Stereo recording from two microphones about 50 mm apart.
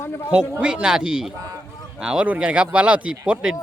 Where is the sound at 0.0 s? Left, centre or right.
Left.